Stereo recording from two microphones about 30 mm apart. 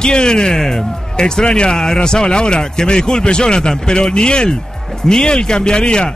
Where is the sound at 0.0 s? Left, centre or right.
Left.